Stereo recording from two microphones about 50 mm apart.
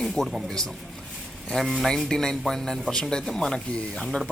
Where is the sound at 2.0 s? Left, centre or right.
Centre.